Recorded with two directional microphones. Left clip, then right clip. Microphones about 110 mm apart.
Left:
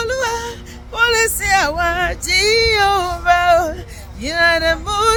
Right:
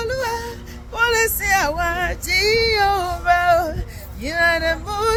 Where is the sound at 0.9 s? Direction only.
35° left (ahead or behind).